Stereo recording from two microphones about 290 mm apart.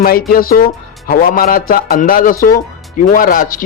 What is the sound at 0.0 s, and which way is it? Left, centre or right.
Speech, left.